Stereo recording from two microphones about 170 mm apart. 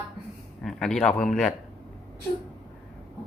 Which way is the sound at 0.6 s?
5° left (ahead or behind).